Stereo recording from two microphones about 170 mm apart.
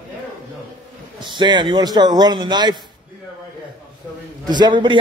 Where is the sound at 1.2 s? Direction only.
25° right (ahead or behind).